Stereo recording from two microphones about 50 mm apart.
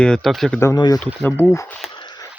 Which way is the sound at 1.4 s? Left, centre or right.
Left.